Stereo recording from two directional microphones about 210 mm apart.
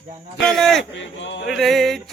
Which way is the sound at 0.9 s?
60° left (ahead or behind).